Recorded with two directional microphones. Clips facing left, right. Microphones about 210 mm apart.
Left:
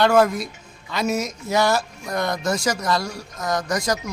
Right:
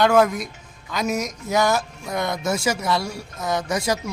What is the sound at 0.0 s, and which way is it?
Speech, centre (ahead or behind).